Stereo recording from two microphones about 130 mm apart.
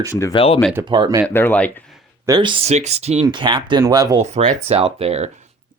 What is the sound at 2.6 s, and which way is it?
Speech, 60° right (ahead or behind).